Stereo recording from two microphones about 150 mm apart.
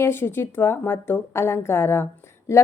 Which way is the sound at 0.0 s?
15° left (ahead or behind).